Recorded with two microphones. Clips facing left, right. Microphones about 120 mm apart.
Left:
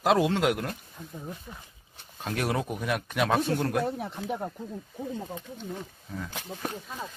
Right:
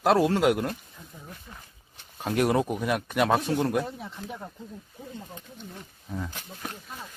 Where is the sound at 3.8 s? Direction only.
60° left (ahead or behind).